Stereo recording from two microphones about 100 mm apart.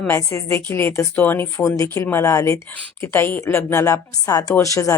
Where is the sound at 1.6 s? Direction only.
35° left (ahead or behind).